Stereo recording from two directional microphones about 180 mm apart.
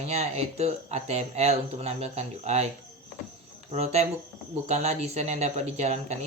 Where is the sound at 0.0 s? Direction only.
35° right (ahead or behind).